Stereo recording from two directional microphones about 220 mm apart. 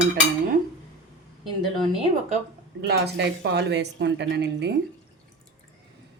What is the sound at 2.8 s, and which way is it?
Speech, 45° right (ahead or behind).